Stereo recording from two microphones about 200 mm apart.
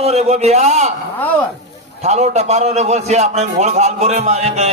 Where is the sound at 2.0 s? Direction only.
35° right (ahead or behind).